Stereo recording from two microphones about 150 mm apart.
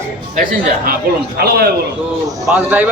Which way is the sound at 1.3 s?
90° right.